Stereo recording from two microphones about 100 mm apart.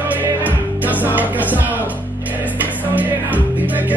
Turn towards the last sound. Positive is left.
turn(degrees=-15)  # may be behind; listen again after turning